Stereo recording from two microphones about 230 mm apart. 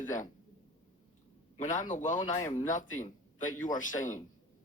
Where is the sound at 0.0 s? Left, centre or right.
Left.